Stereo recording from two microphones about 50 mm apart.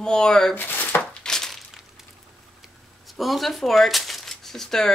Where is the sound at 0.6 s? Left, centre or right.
Left.